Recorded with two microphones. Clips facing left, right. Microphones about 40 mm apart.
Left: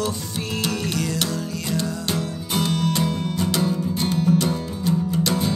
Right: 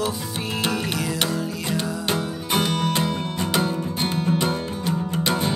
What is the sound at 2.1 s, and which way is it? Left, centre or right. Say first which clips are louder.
Music: right 4 dB; right.